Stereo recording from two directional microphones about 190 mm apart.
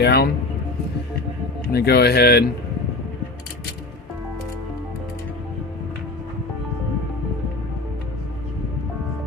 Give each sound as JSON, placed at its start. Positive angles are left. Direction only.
{"t": 0.0, "sound": "speech", "side_deg": 60}
{"t": 1.7, "sound": "speech", "side_deg": 55}